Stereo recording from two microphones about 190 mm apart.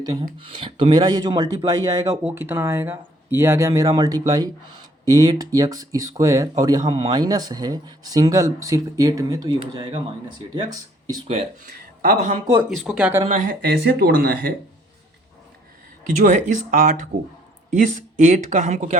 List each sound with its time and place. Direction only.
0.0 s speech: 20° right (ahead or behind)
12.0 s speech: 35° right (ahead or behind)
12.6 s speech: centre (ahead or behind)
13.2 s speech: 40° right (ahead or behind)
13.6 s speech: 60° right (ahead or behind)
16.0 s speech: 40° right (ahead or behind)